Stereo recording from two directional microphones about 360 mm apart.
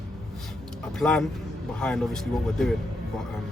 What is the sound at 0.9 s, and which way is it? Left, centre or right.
Speech, centre.